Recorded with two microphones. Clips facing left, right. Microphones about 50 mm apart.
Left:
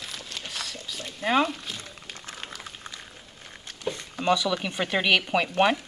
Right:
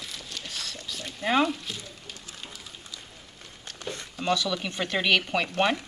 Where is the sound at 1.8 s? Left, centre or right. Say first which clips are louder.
Left 2 dB; left.